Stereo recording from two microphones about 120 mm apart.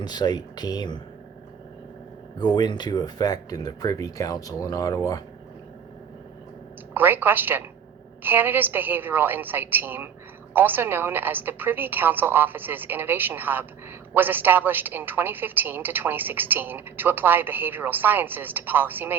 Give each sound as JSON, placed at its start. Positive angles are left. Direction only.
{"t": 0.0, "sound": "speech", "side_deg": 35}
{"t": 2.4, "sound": "speech", "side_deg": 35}
{"t": 6.9, "sound": "a woman's voice", "side_deg": -15}